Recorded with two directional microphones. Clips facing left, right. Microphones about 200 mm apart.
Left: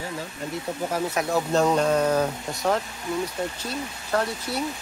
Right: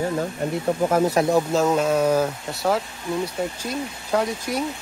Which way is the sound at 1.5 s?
5° right (ahead or behind).